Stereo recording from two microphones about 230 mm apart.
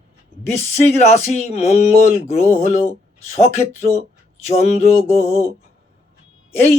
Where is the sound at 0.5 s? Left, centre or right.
Left.